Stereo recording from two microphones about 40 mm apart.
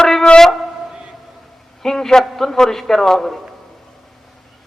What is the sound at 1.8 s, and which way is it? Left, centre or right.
A man's voice, centre.